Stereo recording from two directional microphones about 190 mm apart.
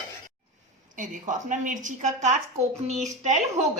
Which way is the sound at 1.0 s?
40° right (ahead or behind).